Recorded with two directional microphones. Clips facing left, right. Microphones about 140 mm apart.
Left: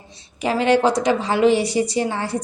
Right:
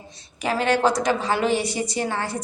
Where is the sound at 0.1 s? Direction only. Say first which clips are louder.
Left 3 dB; 25° left (ahead or behind).